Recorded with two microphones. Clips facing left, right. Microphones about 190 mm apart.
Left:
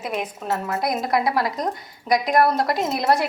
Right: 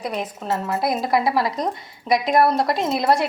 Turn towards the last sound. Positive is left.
turn(degrees=0)  # may be behind; listen again after turning